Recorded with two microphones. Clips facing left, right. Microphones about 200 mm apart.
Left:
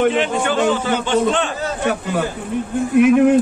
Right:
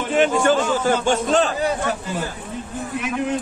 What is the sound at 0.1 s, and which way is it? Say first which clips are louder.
A man's voice: right 2 dB; 45° right (ahead or behind).